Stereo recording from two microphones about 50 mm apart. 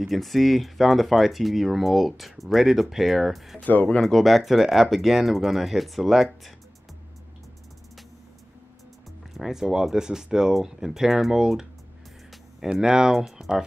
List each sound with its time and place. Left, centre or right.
0.0 s speech: centre
3.6 s speech: left
4.0 s speech: centre
9.3 s speech: centre
12.8 s speech: centre